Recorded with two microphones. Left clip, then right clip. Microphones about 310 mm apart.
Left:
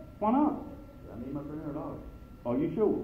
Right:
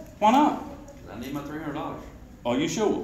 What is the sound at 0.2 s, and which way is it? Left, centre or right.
Speech, right.